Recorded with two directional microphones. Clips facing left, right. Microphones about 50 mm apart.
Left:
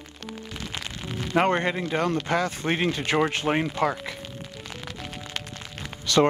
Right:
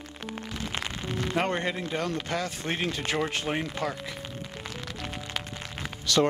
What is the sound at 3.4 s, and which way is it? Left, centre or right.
Speech, left.